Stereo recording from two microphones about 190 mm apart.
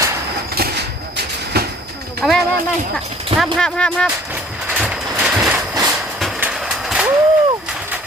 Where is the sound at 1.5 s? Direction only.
55° right (ahead or behind).